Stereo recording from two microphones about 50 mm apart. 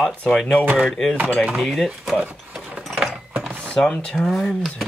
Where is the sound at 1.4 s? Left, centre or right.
Centre.